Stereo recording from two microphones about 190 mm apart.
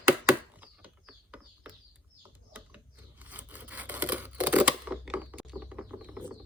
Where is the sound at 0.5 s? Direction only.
10° right (ahead or behind).